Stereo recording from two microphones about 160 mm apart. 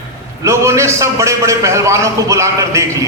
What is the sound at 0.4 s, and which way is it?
A man's voice, 15° right (ahead or behind).